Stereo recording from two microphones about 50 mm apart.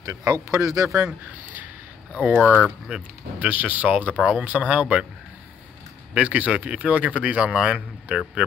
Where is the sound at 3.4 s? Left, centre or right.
Right.